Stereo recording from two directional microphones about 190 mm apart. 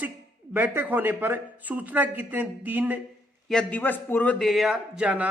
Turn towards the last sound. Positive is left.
turn(degrees=-5)  # may be behind; listen again after turning